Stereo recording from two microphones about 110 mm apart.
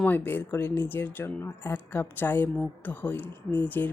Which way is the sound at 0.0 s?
15° left (ahead or behind).